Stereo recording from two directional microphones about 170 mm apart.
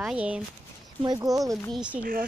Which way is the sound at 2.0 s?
55° right (ahead or behind).